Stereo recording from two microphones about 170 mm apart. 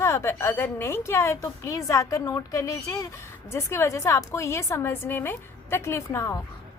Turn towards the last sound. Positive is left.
turn(degrees=15)  # may be behind; listen again after turning